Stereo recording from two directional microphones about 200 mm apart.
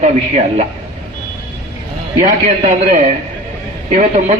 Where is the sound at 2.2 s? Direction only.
40° right (ahead or behind).